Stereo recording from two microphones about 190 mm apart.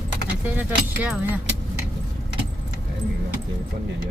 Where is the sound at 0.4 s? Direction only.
10° right (ahead or behind).